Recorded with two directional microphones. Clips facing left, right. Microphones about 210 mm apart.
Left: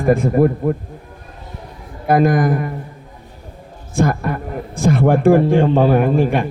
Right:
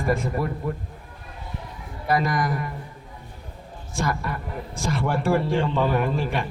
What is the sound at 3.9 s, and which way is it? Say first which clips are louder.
A man's voice: left 9 dB; 55° left (ahead or behind).